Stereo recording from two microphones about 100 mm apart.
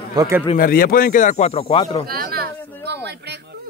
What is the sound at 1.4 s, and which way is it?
Speech, 85° left.